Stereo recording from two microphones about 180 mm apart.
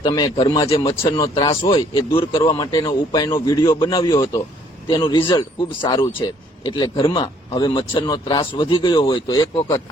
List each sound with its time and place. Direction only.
0.0 s speech: 25° left (ahead or behind)
1.6 s speech: 30° left (ahead or behind)